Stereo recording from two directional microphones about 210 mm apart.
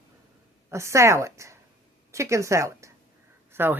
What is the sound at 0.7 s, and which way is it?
A woman's voice, 15° right (ahead or behind).